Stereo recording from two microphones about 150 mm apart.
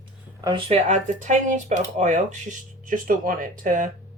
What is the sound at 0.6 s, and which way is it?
Speech, 45° right (ahead or behind).